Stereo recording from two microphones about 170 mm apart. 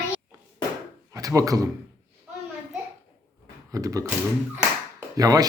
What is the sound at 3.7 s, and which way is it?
Speech, 20° right (ahead or behind).